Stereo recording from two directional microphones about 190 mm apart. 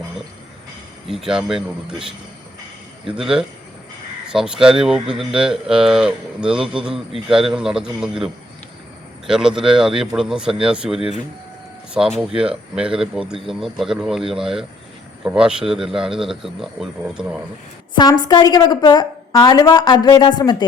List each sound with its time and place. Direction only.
1.0 s speech: centre (ahead or behind)
3.2 s speech: 5° right (ahead or behind)
17.9 s a woman's voice: 20° left (ahead or behind)